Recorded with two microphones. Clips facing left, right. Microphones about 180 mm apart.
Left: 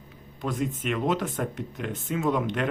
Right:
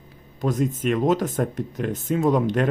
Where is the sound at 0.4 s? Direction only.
40° right (ahead or behind).